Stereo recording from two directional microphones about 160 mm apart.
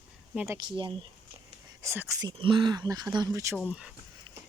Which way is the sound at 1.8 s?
15° right (ahead or behind).